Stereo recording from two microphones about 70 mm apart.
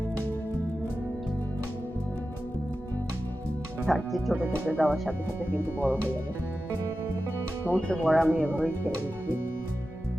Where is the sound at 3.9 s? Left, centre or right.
Centre.